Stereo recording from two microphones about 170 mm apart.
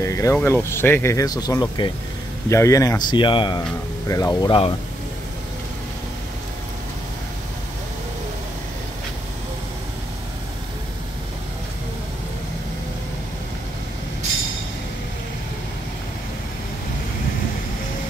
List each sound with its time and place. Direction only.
0.0 s speech: 15° left (ahead or behind)